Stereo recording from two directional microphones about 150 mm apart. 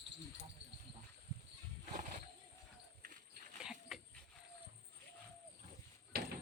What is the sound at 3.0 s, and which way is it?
Dog, 65° right (ahead or behind).